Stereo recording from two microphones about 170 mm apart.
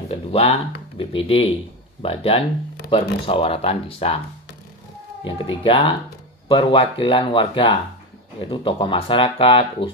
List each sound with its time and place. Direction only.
0.1 s speech: 35° left (ahead or behind)
5.2 s speech: 30° left (ahead or behind)